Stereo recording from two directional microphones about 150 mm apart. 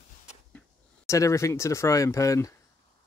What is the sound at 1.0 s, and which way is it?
Speech, 20° left (ahead or behind).